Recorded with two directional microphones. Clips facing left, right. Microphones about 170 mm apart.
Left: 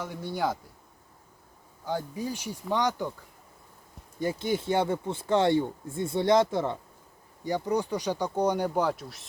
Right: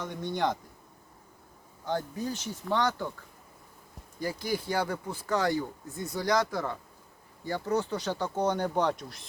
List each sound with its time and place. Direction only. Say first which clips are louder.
0.0 s speech: even; 10° left (ahead or behind)
1.8 s speech: even; 10° left (ahead or behind)
4.2 s speech: left 3 dB; 25° left (ahead or behind); by 9.2 s 5° left (ahead or behind)